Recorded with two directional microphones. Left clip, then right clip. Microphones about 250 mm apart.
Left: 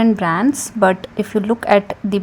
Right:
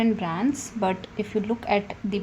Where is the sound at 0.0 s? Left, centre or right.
Left.